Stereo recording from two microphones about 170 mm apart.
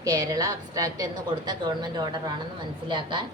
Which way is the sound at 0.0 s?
20° right (ahead or behind).